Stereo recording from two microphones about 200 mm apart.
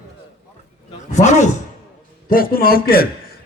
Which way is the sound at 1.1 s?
35° left (ahead or behind).